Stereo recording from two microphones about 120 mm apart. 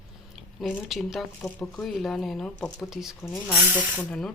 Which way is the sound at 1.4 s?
15° left (ahead or behind).